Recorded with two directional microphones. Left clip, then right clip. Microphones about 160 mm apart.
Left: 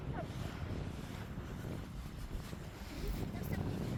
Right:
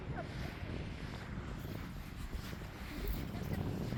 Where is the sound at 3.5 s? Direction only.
Centre (ahead or behind).